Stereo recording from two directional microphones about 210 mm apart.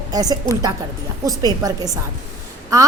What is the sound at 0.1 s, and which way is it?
A woman's voice, 20° right (ahead or behind).